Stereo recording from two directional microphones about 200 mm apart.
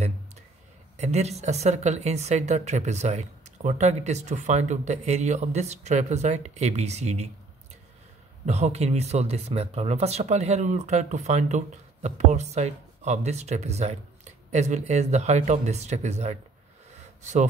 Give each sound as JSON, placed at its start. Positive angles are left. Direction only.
{"t": 0.9, "sound": "speech", "side_deg": -35}
{"t": 8.5, "sound": "speech", "side_deg": -35}
{"t": 16.9, "sound": "a sound", "side_deg": -35}